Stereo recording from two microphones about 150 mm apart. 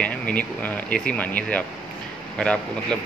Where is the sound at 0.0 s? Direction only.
10° left (ahead or behind).